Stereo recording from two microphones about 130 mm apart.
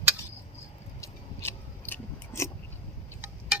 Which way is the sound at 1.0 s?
15° left (ahead or behind).